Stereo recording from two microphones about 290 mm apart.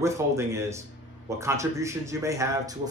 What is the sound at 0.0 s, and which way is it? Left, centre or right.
Speech, centre.